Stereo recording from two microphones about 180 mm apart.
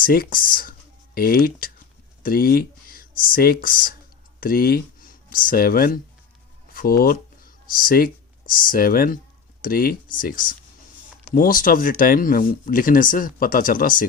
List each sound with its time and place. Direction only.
0.0 s speech: 55° left (ahead or behind)